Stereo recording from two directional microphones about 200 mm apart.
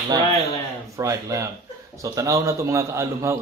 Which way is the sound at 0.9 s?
15° right (ahead or behind).